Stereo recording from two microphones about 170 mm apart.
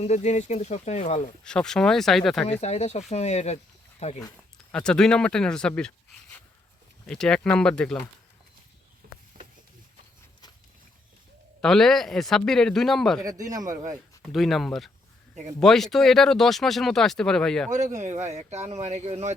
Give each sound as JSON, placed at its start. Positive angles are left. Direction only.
{"t": 0.0, "sound": "speech", "side_deg": 40}
{"t": 1.5, "sound": "speech", "side_deg": 5}
{"t": 2.5, "sound": "speech", "side_deg": 40}
{"t": 4.5, "sound": "speech", "side_deg": 5}
{"t": 9.0, "sound": "a sound", "side_deg": -60}
{"t": 11.6, "sound": "speech", "side_deg": 5}
{"t": 13.2, "sound": "speech", "side_deg": -20}
{"t": 14.2, "sound": "speech", "side_deg": 0}
{"t": 17.7, "sound": "speech", "side_deg": -45}